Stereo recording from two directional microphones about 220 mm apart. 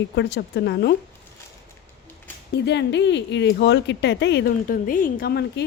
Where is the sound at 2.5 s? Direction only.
50° left (ahead or behind).